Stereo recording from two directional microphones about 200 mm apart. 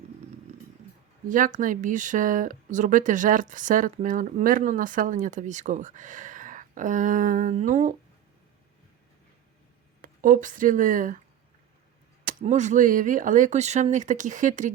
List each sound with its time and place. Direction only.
1.3 s speech: 40° right (ahead or behind)
10.0 s speech: 45° right (ahead or behind)
12.2 s speech: 40° right (ahead or behind)